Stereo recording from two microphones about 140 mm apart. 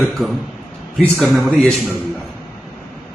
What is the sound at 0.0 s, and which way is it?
A man's voice, centre (ahead or behind).